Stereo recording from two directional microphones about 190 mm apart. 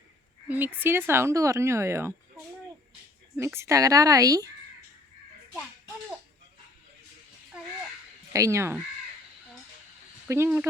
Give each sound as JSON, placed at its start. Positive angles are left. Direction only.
{"t": 0.4, "sound": "speech", "side_deg": -10}
{"t": 3.3, "sound": "speech", "side_deg": -15}
{"t": 8.3, "sound": "speech", "side_deg": -15}
{"t": 10.2, "sound": "speech", "side_deg": -15}